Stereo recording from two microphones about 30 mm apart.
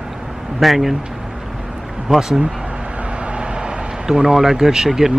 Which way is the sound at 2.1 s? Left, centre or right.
Centre.